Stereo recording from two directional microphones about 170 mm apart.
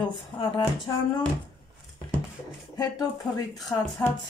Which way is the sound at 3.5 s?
20° left (ahead or behind).